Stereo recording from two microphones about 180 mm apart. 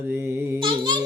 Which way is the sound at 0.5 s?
25° right (ahead or behind).